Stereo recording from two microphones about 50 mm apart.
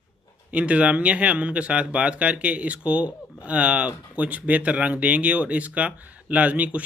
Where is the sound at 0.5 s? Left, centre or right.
Right.